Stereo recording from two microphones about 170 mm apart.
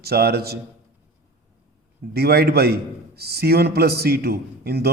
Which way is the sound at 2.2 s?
70° right (ahead or behind).